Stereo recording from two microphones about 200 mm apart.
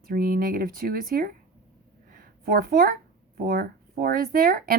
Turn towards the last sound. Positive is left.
turn(degrees=-45)  # may be behind; listen again after turning